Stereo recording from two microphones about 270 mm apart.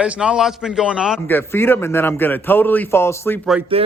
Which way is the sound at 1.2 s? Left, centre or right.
Centre.